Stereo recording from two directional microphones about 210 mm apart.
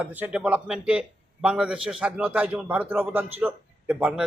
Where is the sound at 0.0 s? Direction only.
5° right (ahead or behind).